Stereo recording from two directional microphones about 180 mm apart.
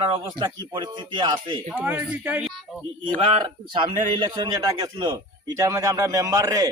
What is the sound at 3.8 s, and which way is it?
A man's voice, 25° right (ahead or behind).